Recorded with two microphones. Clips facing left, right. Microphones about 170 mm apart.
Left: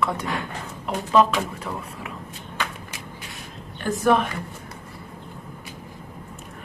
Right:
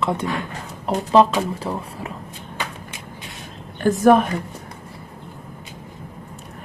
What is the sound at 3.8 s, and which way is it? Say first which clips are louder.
Speech: right 6 dB; 45° right (ahead or behind).